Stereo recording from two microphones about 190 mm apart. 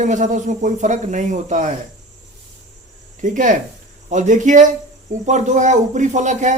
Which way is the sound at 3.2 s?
45° right (ahead or behind).